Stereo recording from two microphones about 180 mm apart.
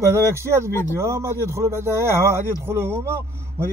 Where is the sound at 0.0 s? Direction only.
15° right (ahead or behind).